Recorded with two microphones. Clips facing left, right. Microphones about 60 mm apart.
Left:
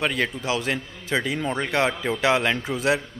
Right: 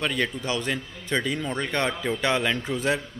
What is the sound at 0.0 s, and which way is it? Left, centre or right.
A man's voice, centre.